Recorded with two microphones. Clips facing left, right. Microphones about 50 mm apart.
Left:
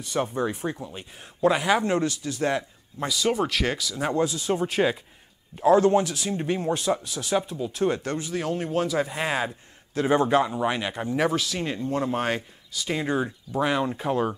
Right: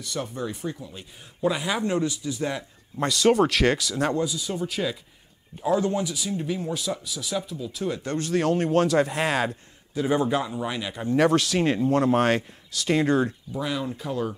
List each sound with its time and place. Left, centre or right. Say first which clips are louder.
0.0 s speech: left 5 dB; left
2.0 s speech: even; left
3.0 s speech: right 5 dB; centre
4.6 s speech: left 5 dB; left
5.5 s speech: left 7 dB; right
6.2 s speech: left 2 dB; left
8.2 s speech: right 5 dB; centre
10.0 s speech: left 3 dB; left
11.1 s speech: right 5 dB; centre
13.6 s speech: left 5 dB; left